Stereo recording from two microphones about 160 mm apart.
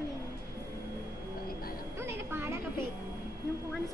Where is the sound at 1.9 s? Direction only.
15° right (ahead or behind).